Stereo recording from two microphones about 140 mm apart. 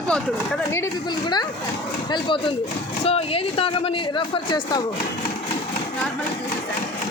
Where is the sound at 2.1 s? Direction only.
35° left (ahead or behind).